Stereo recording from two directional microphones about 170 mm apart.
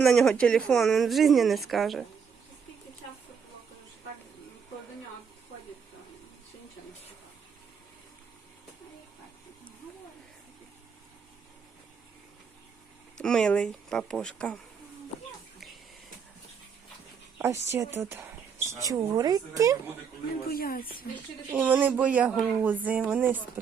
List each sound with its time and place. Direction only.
0.0 s speech: centre (ahead or behind)
13.1 s speech: 5° left (ahead or behind)
17.3 s speech: 15° right (ahead or behind)
20.5 s speech: 60° left (ahead or behind)
21.5 s speech: 10° right (ahead or behind)